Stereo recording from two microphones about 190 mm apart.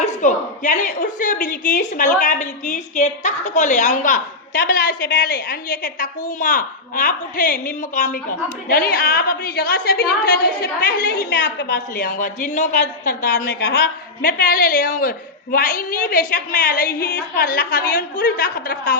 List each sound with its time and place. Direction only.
0.0 s a woman's voice: 40° left (ahead or behind)